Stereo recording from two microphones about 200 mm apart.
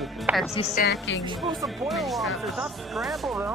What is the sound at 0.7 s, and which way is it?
Speech, 50° left (ahead or behind).